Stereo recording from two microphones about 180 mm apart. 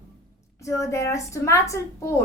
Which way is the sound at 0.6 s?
15° left (ahead or behind).